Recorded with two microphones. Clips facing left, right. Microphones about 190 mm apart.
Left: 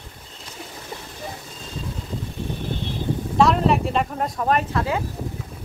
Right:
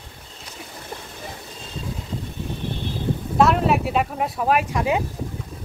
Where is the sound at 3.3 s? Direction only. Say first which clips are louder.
Even; 5° right (ahead or behind).